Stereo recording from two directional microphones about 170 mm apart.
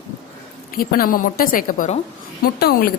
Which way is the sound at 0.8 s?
60° left (ahead or behind).